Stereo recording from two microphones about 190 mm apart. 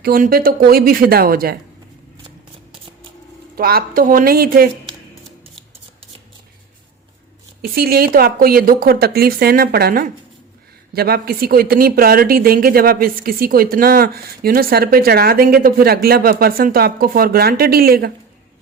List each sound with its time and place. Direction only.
0.0 s speech: 50° right (ahead or behind)
3.5 s speech: 50° right (ahead or behind)
7.6 s speech: 55° right (ahead or behind)